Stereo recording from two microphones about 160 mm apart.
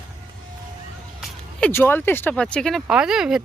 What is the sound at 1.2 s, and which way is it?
Speech, 5° left (ahead or behind).